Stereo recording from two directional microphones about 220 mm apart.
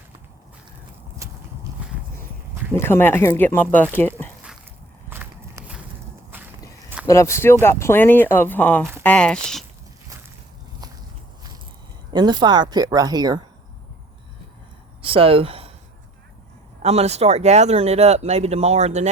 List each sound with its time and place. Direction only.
2.7 s speech: 10° left (ahead or behind)
5.0 s walk: 10° right (ahead or behind)
7.1 s speech: 15° left (ahead or behind)
12.1 s speech: 20° right (ahead or behind)
15.0 s speech: 25° right (ahead or behind)
16.8 s speech: 30° right (ahead or behind)